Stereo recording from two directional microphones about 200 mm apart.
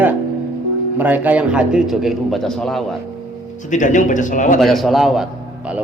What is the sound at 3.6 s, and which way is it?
A man's voice, 40° left (ahead or behind).